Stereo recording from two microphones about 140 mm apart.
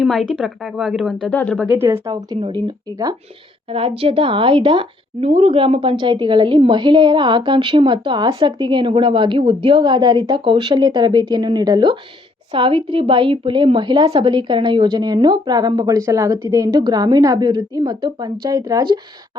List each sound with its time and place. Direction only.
0.0 s a woman's voice: centre (ahead or behind)
1.3 s speech: 10° left (ahead or behind)
1.8 s speech: 15° right (ahead or behind)
2.3 s a woman's voice: 30° right (ahead or behind)
3.7 s a woman's voice: 40° right (ahead or behind); by 18.9 s 25° right (ahead or behind)